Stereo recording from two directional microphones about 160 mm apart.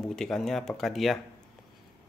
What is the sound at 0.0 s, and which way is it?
Speech, 5° left (ahead or behind).